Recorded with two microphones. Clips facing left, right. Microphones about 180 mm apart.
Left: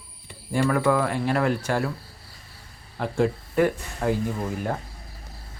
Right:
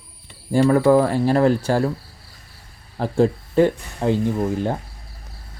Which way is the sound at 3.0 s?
35° right (ahead or behind).